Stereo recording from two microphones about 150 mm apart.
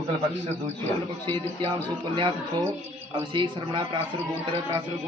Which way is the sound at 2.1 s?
30° right (ahead or behind).